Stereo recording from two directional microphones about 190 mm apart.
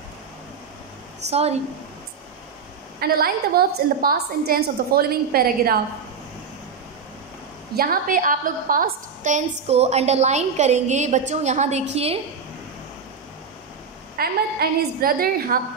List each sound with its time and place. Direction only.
3.0 s a woman's voice: 55° right (ahead or behind)
7.7 s a woman's voice: 50° right (ahead or behind); by 12.2 s 30° right (ahead or behind)
14.1 s a woman's voice: 50° right (ahead or behind)